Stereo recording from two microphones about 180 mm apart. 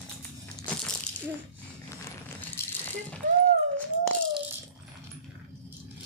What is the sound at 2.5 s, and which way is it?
Rattle, 10° left (ahead or behind).